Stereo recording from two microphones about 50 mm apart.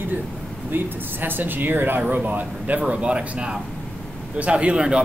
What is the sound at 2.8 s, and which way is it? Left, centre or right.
Speech, right.